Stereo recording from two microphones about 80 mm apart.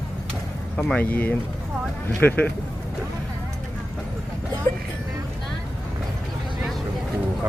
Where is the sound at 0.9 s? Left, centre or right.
Centre.